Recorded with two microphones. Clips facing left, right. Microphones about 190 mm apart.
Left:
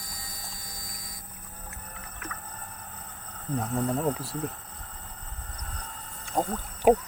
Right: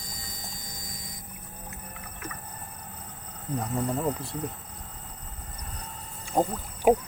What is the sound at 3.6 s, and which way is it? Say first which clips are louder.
Speech: left 1 dB; centre (ahead or behind).